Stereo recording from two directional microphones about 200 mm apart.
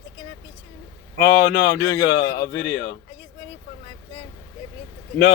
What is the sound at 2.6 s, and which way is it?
Speech, 70° left (ahead or behind).